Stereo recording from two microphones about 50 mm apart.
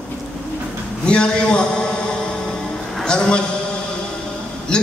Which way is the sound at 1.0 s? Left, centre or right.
Centre.